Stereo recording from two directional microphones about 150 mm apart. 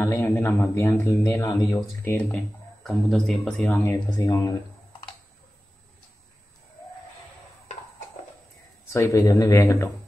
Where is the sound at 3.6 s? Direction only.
20° left (ahead or behind).